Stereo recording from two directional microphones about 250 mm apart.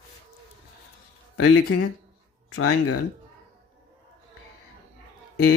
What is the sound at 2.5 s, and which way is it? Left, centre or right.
Speech, left.